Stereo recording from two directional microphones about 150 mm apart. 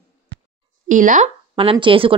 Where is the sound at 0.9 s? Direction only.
60° right (ahead or behind).